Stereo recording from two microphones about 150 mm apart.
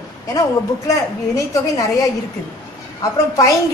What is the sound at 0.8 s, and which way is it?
A woman's voice, 25° left (ahead or behind).